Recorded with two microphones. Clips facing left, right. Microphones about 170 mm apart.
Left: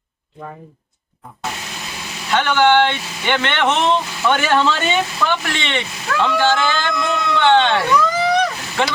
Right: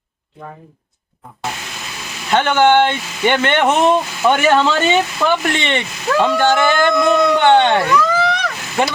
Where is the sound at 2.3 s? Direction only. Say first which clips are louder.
Right 2 dB; 50° right (ahead or behind); by 5.4 s 25° right (ahead or behind).